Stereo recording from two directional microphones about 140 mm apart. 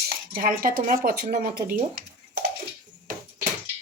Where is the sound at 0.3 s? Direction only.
85° right.